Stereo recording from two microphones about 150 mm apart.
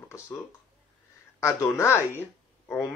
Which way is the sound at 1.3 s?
20° left (ahead or behind).